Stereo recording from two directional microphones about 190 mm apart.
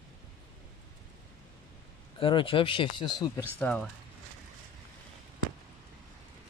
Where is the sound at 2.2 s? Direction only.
25° left (ahead or behind).